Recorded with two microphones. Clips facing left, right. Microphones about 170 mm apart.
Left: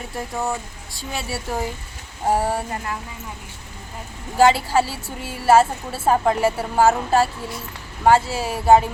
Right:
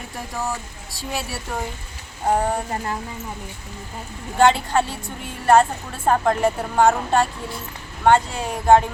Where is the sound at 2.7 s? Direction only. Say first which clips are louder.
Right 2 dB; 30° right (ahead or behind).